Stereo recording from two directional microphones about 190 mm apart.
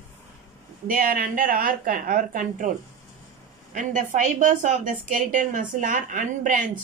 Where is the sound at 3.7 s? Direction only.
40° right (ahead or behind).